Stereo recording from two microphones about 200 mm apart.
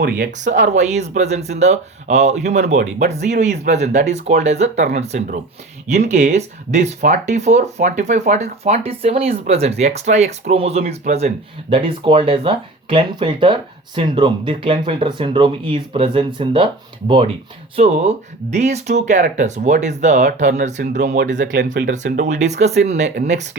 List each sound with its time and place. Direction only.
0.0 s speech: 40° right (ahead or behind); by 16.6 s 25° right (ahead or behind)
17.7 s speech: 30° right (ahead or behind)
21.5 s speech: 60° right (ahead or behind)
21.9 s speech: 35° right (ahead or behind)